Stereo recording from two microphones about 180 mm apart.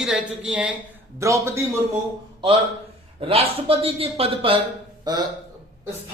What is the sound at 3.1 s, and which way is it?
A man's voice, 30° right (ahead or behind).